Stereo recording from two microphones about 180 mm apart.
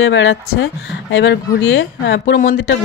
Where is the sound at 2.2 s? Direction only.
55° left (ahead or behind).